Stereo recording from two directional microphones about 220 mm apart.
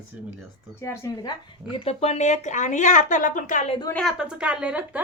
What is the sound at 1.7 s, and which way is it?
Speech, 25° left (ahead or behind).